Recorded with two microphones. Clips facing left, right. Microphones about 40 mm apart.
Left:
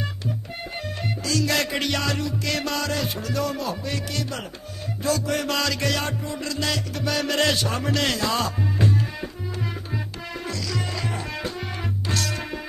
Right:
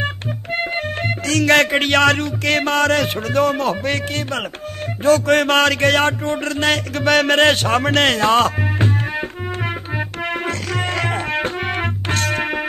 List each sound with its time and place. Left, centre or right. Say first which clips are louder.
0.0 s music: right 6 dB; right